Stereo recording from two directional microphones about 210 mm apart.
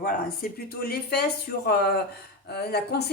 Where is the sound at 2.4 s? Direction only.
50° left (ahead or behind).